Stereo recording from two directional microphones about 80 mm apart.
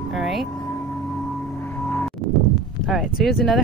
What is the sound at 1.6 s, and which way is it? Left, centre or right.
Music, left.